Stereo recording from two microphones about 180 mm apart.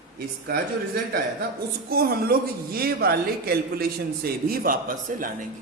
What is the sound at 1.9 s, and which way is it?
A man's voice, 55° right (ahead or behind).